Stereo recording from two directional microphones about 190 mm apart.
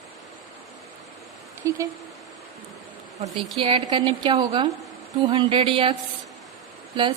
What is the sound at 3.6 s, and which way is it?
A woman's voice, 25° right (ahead or behind).